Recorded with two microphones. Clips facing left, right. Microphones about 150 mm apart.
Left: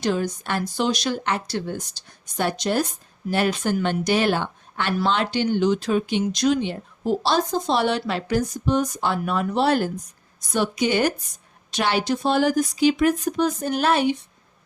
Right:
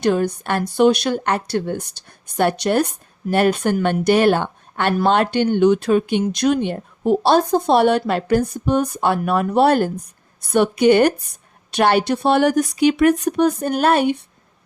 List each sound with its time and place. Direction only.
0.0 s speech: 55° right (ahead or behind)